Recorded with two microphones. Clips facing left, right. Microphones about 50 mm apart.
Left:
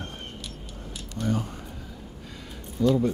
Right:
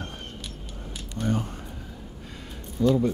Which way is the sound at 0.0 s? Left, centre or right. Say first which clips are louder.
Even; right.